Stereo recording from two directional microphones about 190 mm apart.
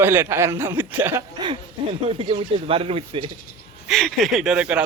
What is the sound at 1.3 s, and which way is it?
Speech, 25° right (ahead or behind).